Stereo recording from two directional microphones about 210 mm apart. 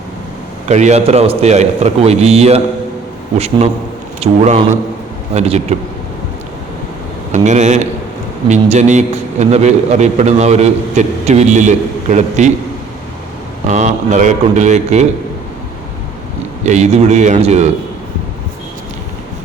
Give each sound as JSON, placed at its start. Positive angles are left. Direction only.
{"t": 0.7, "sound": "a man's voice", "side_deg": -35}
{"t": 7.3, "sound": "a man's voice", "side_deg": -35}
{"t": 13.7, "sound": "a man's voice", "side_deg": -35}
{"t": 16.6, "sound": "a man's voice", "side_deg": -30}